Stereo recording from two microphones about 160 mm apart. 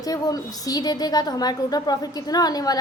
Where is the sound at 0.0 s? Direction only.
20° left (ahead or behind).